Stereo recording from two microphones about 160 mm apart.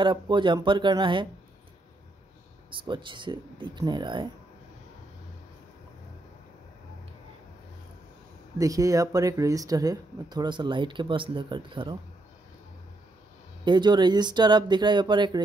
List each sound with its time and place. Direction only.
0.0 s speech: 30° right (ahead or behind)
2.7 s speech: 30° right (ahead or behind)
8.5 s speech: 20° right (ahead or behind)
13.7 s speech: 30° right (ahead or behind)